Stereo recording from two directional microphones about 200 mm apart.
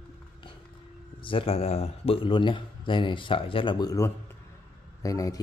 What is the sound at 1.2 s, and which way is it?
Speech, 25° left (ahead or behind).